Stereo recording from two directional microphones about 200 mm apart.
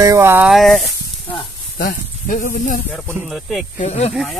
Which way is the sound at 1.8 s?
40° left (ahead or behind).